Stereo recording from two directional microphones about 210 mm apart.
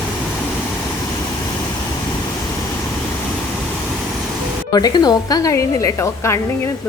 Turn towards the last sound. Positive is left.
turn(degrees=15)  # may be behind; listen again after turning